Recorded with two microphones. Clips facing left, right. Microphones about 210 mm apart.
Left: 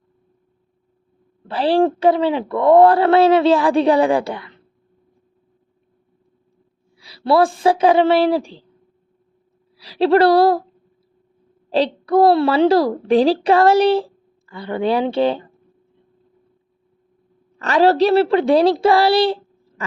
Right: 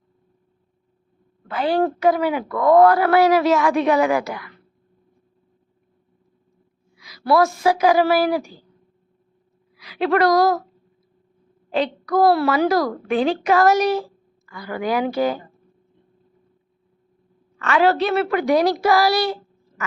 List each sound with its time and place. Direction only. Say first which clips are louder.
1.5 s a woman's voice: left 4 dB; 30° left (ahead or behind)
6.9 s a woman's voice: left 2 dB; 30° left (ahead or behind)
9.7 s a woman's voice: left 5 dB; 30° left (ahead or behind)
11.7 s a woman's voice: left 4 dB; 30° left (ahead or behind)
17.6 s a woman's voice: left 4 dB; 35° left (ahead or behind)